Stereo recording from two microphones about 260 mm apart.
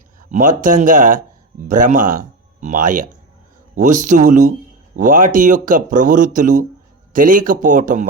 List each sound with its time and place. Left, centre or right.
0.2 s a man's voice: right